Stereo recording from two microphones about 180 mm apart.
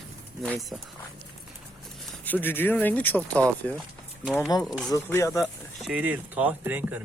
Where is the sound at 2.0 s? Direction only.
5° left (ahead or behind).